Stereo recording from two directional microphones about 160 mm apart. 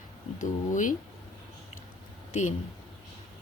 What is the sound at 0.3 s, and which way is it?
Speech, 55° left (ahead or behind).